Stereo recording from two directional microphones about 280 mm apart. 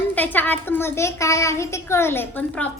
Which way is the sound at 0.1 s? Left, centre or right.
Centre.